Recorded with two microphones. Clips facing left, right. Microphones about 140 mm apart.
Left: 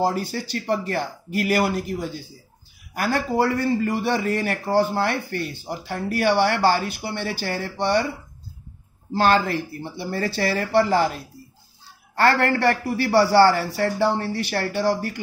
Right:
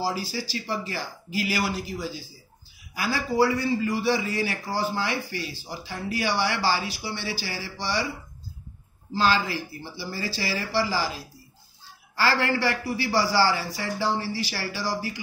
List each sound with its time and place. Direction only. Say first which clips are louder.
0.0 s speech: left 5 dB; 60° left (ahead or behind)
9.1 s speech: left 5 dB; 60° left (ahead or behind)